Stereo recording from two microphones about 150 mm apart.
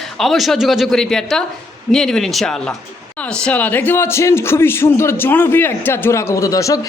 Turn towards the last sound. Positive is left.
turn(degrees=20)  # may be behind; listen again after turning